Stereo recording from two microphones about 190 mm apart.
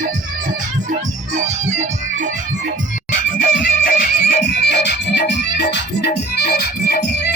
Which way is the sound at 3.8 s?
55° left (ahead or behind).